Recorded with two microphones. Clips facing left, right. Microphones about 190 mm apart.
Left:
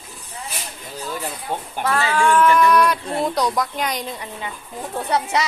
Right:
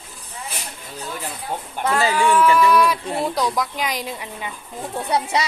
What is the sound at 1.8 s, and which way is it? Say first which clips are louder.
Speech: right 2 dB; 20° right (ahead or behind).